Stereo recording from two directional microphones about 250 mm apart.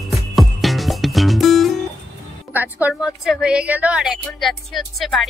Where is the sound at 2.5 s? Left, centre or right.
Centre.